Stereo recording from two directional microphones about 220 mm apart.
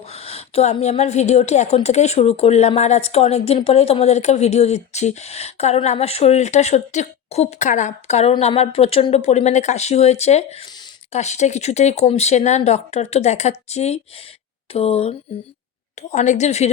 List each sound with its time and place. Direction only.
0.1 s a woman's voice: 25° left (ahead or behind)